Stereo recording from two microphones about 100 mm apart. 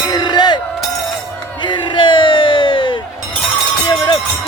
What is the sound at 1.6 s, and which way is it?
Crowd, 50° left (ahead or behind).